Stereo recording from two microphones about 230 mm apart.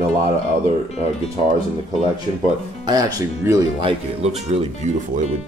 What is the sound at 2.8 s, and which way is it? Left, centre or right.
Speech, centre.